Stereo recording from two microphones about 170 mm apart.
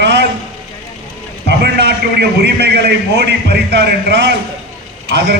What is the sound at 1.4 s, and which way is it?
A man's voice, 75° right (ahead or behind).